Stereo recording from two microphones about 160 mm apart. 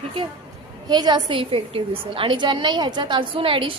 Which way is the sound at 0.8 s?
25° right (ahead or behind).